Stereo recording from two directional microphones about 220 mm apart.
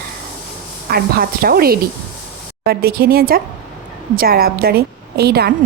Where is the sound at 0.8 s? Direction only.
40° right (ahead or behind).